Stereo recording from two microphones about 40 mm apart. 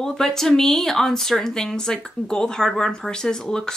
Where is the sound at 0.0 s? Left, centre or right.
Centre.